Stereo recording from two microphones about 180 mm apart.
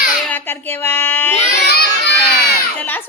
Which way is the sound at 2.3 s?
10° left (ahead or behind).